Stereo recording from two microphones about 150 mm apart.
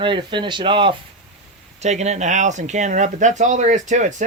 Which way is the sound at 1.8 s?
50° right (ahead or behind).